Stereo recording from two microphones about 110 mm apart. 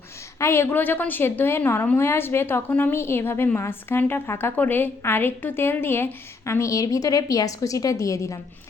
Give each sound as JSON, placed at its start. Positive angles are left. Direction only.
{"t": 0.3, "sound": "a woman's voice", "side_deg": 25}